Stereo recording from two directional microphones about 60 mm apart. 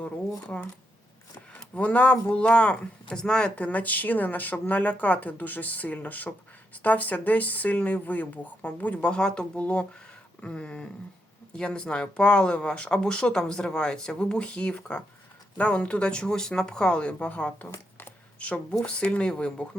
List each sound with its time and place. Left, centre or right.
0.5 s speech: left
1.7 s speech: left